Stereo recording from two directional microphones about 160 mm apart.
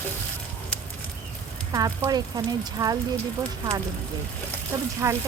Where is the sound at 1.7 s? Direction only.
20° right (ahead or behind).